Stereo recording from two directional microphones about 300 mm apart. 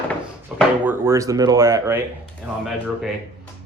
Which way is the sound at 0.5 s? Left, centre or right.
Centre.